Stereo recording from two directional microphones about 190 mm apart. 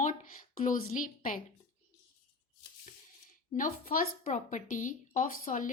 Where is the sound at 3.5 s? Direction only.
45° left (ahead or behind).